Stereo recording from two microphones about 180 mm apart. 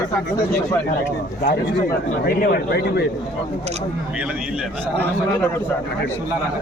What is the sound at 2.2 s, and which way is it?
Speech, 60° left (ahead or behind).